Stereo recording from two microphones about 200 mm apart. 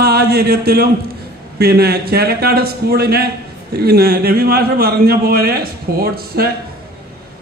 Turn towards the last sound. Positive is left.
turn(degrees=-50)  # may be behind; listen again after turning